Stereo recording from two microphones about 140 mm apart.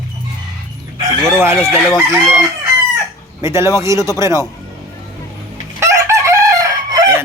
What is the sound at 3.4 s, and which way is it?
Speech, 20° right (ahead or behind).